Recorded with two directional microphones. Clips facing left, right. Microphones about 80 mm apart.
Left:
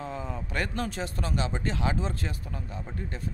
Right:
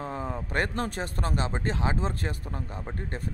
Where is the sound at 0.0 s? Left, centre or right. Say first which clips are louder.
Right 2 dB; right.